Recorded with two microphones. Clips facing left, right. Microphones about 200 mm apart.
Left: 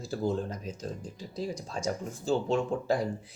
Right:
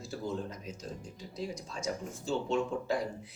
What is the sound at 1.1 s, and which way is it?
Speech, 30° left (ahead or behind).